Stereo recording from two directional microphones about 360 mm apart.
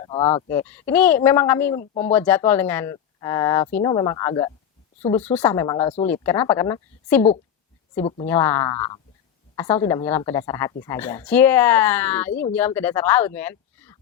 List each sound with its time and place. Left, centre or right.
0.0 s a woman's voice: centre
8.3 s a woman's voice: centre